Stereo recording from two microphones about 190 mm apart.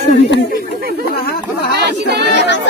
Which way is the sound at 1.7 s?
60° right (ahead or behind).